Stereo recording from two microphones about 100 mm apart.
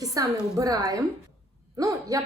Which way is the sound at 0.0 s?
35° right (ahead or behind).